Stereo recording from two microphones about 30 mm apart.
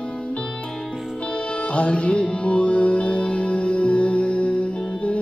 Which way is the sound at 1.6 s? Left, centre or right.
Left.